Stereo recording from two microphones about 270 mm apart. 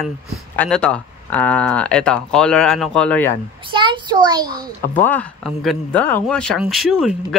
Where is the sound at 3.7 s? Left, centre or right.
Centre.